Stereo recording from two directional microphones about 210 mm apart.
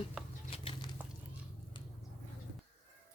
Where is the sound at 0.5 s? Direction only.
25° left (ahead or behind).